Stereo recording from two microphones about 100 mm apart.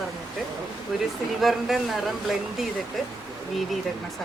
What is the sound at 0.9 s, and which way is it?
Speech, centre (ahead or behind).